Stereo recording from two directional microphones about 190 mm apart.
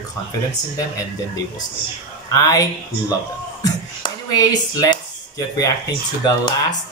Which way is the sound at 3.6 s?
20° left (ahead or behind).